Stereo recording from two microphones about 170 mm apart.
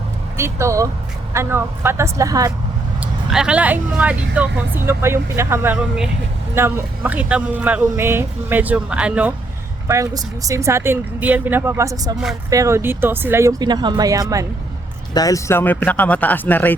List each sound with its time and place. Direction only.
0.3 s speech: 15° right (ahead or behind)
3.0 s speech: 5° right (ahead or behind)
9.8 s speech: 20° right (ahead or behind)
15.1 s speech: 20° left (ahead or behind)